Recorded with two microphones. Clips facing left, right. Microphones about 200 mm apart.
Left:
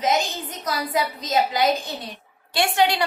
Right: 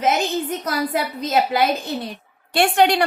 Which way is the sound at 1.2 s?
50° right (ahead or behind).